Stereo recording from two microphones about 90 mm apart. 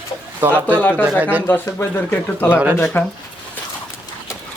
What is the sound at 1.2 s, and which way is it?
Speech, 15° right (ahead or behind).